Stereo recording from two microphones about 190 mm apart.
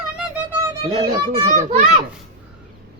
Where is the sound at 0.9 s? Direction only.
30° right (ahead or behind).